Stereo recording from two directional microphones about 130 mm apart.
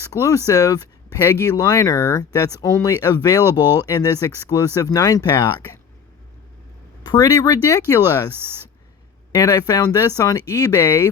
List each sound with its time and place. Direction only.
0.0 s speech: 25° left (ahead or behind)
7.0 s speech: 30° left (ahead or behind)
9.3 s speech: 25° left (ahead or behind)